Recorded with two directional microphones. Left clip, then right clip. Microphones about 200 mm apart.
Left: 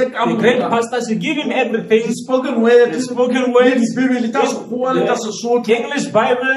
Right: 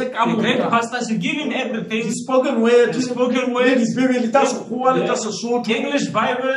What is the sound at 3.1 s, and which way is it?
Speech, 35° left (ahead or behind).